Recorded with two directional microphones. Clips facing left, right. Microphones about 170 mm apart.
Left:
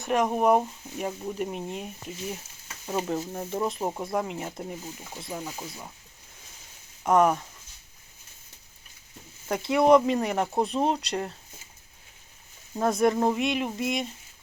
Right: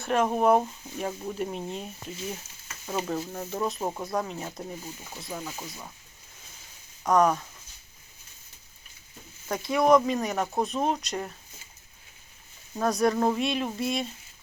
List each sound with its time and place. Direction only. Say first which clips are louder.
0.0 s speech: even; 15° left (ahead or behind)
5.6 s speech: left 1 dB; 5° left (ahead or behind)
7.0 s speech: left 1 dB; 25° left (ahead or behind)
9.5 s speech: left 2 dB; 25° left (ahead or behind)
12.8 s speech: left 1 dB; 25° left (ahead or behind)